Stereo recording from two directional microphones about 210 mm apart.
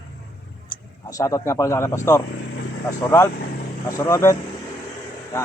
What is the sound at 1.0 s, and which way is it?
Speech, 15° left (ahead or behind).